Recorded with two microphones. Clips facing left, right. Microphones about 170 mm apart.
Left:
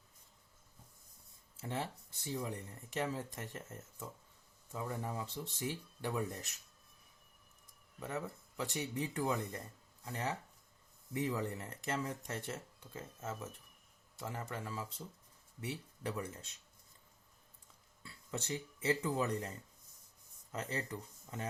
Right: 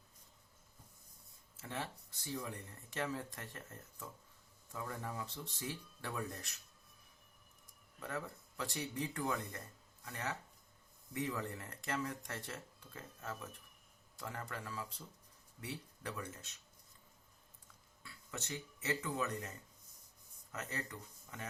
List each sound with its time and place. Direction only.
1.6 s speech: 25° left (ahead or behind)
7.9 s speech: 20° left (ahead or behind)
18.0 s speech: 30° left (ahead or behind)